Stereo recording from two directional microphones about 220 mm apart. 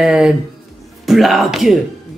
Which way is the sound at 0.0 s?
5° right (ahead or behind).